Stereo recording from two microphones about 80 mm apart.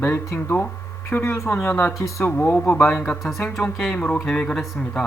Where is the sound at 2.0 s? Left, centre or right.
Left.